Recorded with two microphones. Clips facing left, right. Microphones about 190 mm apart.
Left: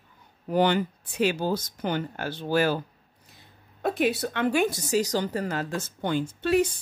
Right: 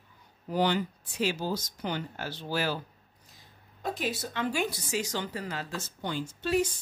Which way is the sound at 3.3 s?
60° left (ahead or behind).